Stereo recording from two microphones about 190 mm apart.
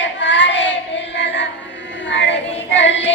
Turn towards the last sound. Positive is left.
turn(degrees=70)  # may be behind; listen again after turning